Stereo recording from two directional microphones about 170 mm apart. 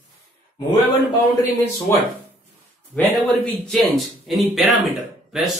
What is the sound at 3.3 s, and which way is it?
Speech, 5° left (ahead or behind).